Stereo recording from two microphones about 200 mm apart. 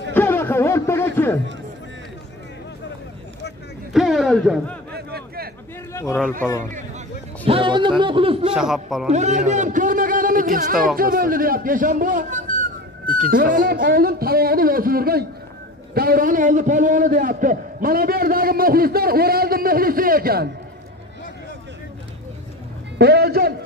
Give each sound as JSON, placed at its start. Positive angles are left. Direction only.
{"t": 0.1, "sound": "a sound", "side_deg": 10}
{"t": 3.9, "sound": "speech", "side_deg": 0}
{"t": 4.9, "sound": "a sound", "side_deg": -50}
{"t": 7.4, "sound": "speech", "side_deg": -25}
{"t": 8.5, "sound": "a man's voice", "side_deg": -5}
{"t": 9.1, "sound": "a man's voice", "side_deg": -35}
{"t": 22.9, "sound": "a man's voice", "side_deg": -55}